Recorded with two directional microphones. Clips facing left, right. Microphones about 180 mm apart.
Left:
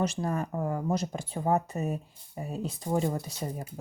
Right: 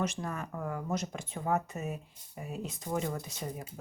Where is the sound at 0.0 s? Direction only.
35° left (ahead or behind).